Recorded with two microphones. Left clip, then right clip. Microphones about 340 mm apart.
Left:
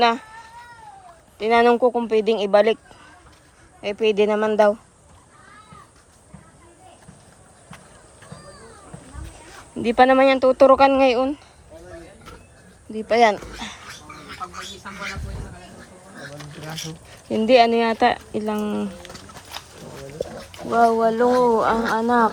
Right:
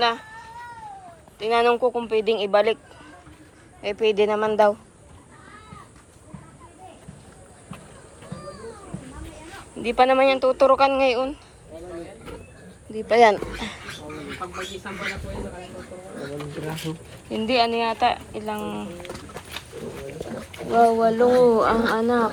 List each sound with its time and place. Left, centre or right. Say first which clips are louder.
0.0 s speech: left 4 dB; left
1.4 s speech: left 3 dB; left
3.8 s speech: left 1 dB; left
9.7 s speech: left 3 dB; left
10.0 s speech: left 3 dB; left
10.5 s speech: left 4 dB; left
13.1 s speech: right 1 dB; left
17.2 s speech: left 6 dB; left
20.7 s speech: left 1 dB; left